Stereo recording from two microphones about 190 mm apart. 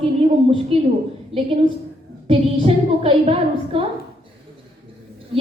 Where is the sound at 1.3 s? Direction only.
Centre (ahead or behind).